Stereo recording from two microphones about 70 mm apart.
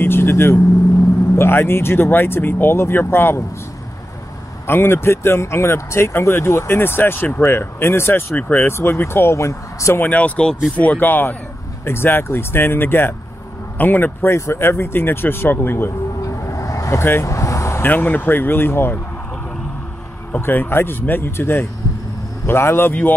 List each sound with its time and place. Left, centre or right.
0.0 s vehicle: left
1.3 s speech: left
4.6 s speech: left
10.0 s speech: left
14.3 s speech: left
16.3 s vehicle: left
17.0 s speech: left
17.3 s vehicle: left
17.8 s speech: left
20.3 s speech: left